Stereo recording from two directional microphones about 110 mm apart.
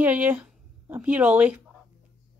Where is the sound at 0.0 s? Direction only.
15° right (ahead or behind).